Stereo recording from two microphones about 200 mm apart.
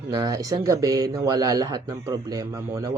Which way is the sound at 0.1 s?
20° right (ahead or behind).